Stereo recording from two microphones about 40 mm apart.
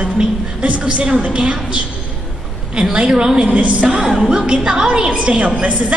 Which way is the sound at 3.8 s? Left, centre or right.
Centre.